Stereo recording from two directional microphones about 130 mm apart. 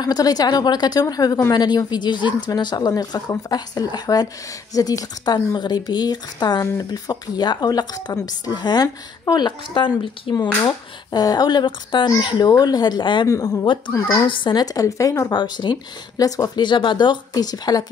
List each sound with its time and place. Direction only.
0.0 s speech: 30° left (ahead or behind)
13.3 s speech: 25° left (ahead or behind)
14.1 s speech: 40° left (ahead or behind)